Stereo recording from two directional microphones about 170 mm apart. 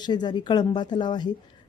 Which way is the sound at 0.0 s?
25° left (ahead or behind).